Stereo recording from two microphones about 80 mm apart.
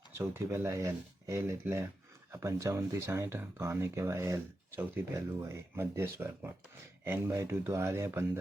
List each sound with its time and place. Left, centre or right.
0.2 s speech: right